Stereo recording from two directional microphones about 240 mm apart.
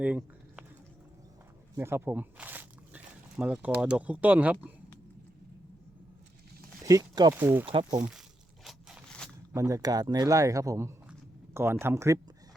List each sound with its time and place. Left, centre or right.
0.0 s a sound: centre
1.7 s speech: centre
6.8 s a man's voice: centre
7.7 s speech: right
8.6 s a sound: centre
9.5 s a man's voice: centre